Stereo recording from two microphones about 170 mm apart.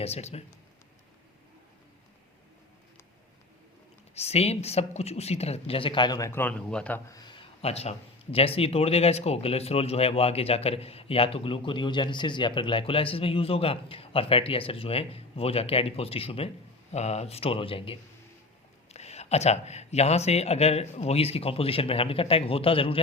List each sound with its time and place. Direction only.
0.0 s speech: 40° left (ahead or behind)
4.1 s speech: 40° left (ahead or behind); by 7.0 s 5° left (ahead or behind)
7.1 s speech: 25° left (ahead or behind)